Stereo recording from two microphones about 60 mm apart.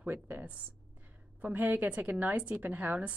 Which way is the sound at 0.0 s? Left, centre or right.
Right.